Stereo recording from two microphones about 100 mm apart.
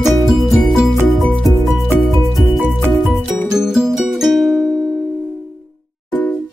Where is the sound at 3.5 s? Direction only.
5° right (ahead or behind).